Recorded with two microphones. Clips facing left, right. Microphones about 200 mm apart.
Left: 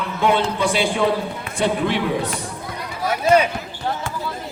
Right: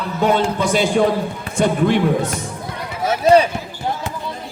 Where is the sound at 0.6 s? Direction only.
45° right (ahead or behind).